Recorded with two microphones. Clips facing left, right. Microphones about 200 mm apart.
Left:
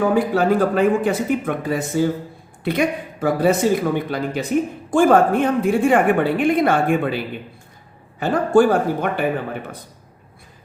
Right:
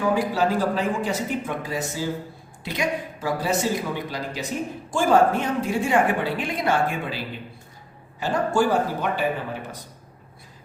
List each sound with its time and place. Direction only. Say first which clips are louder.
0.0 s speech: left 5 dB; 55° left (ahead or behind)